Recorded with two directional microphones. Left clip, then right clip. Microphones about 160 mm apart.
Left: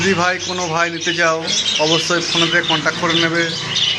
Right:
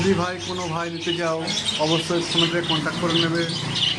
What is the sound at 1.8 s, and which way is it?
Speech, 15° left (ahead or behind).